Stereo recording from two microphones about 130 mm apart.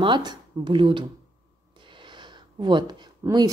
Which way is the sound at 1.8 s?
40° right (ahead or behind).